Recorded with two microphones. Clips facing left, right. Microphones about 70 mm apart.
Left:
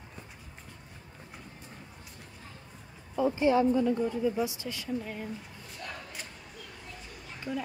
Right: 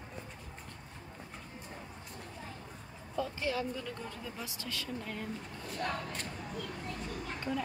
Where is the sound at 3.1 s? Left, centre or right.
Left.